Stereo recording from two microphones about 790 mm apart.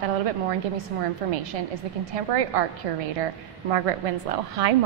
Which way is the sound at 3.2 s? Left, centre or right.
Right.